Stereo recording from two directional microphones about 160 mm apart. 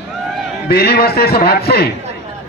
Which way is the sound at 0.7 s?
80° left.